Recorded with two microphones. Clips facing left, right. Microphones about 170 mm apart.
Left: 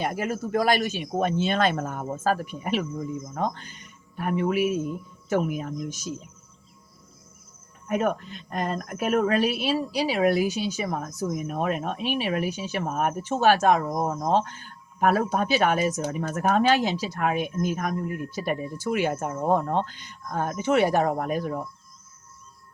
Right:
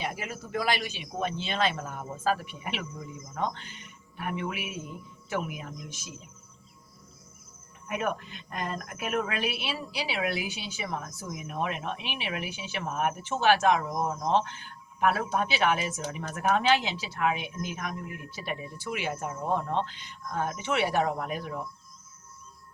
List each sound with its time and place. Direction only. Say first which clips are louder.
0.0 s a woman's voice: left 8 dB; 45° left (ahead or behind)
7.9 s a woman's voice: left 6 dB; 40° left (ahead or behind)